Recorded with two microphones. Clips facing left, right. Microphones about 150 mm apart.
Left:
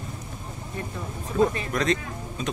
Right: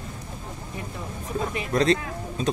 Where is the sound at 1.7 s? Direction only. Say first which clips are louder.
Right 4 dB; 30° right (ahead or behind).